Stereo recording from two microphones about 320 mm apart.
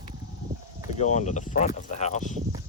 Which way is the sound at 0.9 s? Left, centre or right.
Left.